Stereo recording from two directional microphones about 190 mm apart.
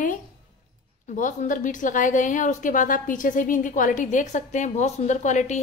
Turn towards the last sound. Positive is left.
turn(degrees=40)  # may be behind; listen again after turning